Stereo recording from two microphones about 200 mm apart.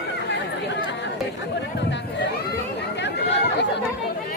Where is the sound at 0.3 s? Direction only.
60° left (ahead or behind).